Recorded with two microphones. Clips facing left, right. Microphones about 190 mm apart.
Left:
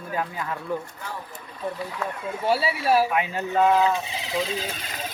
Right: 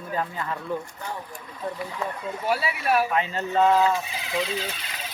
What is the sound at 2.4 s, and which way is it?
Speech, 30° left (ahead or behind).